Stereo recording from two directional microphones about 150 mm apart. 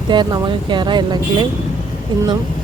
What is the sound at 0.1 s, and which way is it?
Speech, 30° right (ahead or behind).